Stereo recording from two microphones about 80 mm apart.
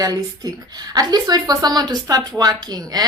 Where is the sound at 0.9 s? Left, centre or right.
Right.